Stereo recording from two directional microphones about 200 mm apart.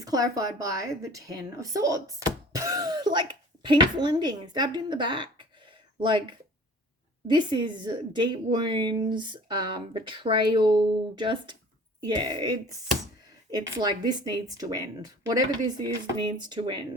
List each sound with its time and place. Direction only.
0.0 s a woman's voice: 20° right (ahead or behind)
13.7 s speech: 20° right (ahead or behind)